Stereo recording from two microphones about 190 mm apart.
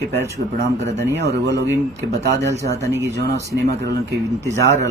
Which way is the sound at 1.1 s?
65° right (ahead or behind).